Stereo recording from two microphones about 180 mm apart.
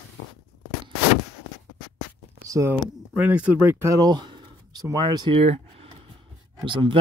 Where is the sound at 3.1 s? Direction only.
5° right (ahead or behind).